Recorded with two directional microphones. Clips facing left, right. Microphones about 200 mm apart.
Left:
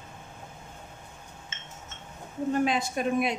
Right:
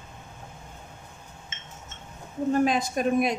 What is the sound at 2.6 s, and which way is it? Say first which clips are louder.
Speech: right 3 dB; 45° right (ahead or behind).